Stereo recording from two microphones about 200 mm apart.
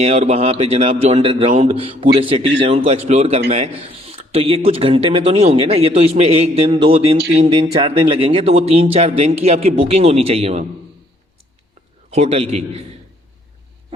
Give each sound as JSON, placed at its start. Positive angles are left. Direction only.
{"t": 0.0, "sound": "a man's voice", "side_deg": -30}
{"t": 12.1, "sound": "a man's voice", "side_deg": -30}